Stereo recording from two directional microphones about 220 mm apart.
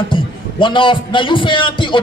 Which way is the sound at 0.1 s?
20° left (ahead or behind).